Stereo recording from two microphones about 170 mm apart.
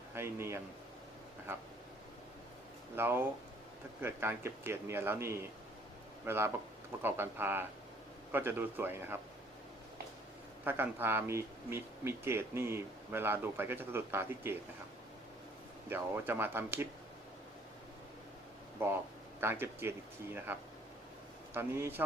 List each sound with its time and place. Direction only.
0.1 s a man's voice: 15° right (ahead or behind)
2.9 s speech: 15° right (ahead or behind)
10.6 s speech: 10° right (ahead or behind)
15.9 s speech: 10° right (ahead or behind)
18.8 s speech: 15° right (ahead or behind)